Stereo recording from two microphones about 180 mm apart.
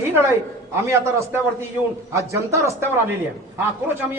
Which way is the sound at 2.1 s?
15° right (ahead or behind).